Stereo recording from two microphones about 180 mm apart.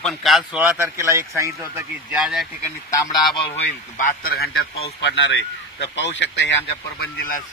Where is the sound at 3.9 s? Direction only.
50° left (ahead or behind).